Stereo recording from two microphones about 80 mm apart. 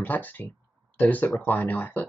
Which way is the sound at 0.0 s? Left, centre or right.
Left.